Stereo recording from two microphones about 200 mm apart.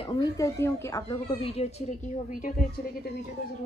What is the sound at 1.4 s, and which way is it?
Speech, 30° left (ahead or behind).